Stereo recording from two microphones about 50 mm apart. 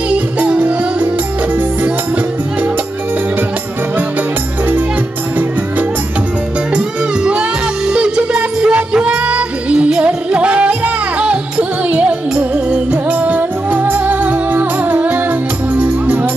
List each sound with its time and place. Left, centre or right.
0.6 s music: right
7.2 s music: right